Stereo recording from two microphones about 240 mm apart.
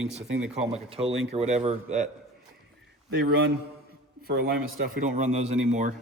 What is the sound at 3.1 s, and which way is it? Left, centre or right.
Speech, right.